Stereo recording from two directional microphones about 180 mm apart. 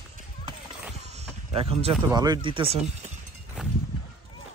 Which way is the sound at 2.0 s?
20° right (ahead or behind).